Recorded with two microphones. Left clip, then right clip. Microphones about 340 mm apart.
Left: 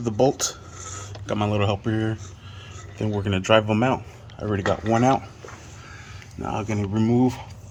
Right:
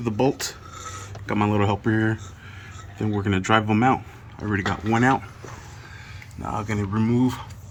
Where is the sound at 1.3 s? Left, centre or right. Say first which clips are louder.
Right 1 dB; right.